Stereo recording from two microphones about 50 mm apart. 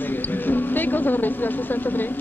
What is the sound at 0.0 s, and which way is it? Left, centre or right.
Speech, left.